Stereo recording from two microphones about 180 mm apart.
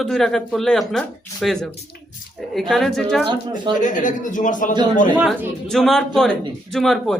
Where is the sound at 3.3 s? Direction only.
25° right (ahead or behind).